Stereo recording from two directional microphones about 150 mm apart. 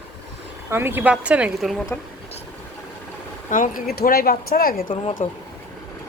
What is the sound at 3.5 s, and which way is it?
Speech, 60° left (ahead or behind).